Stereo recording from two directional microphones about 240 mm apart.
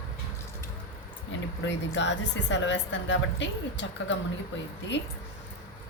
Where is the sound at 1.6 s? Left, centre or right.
Left.